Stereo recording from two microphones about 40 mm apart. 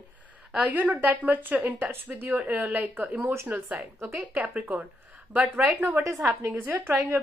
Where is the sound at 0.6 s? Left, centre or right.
Right.